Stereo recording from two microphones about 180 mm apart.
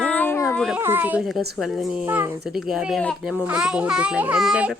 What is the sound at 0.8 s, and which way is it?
A child's voice, 10° right (ahead or behind).